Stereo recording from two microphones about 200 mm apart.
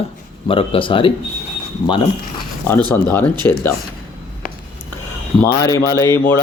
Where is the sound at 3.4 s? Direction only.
15° left (ahead or behind).